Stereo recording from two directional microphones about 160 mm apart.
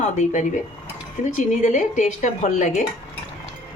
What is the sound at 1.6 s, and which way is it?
Speech, 50° left (ahead or behind).